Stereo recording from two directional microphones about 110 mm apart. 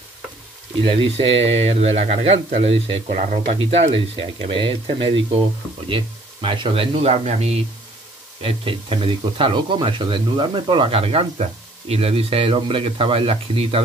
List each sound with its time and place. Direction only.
0.8 s speech: 60° right (ahead or behind); by 7.5 s 80° right
8.4 s speech: 60° right (ahead or behind)